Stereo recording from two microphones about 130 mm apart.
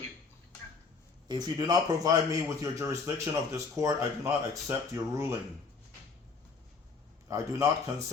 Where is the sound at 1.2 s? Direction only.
30° right (ahead or behind).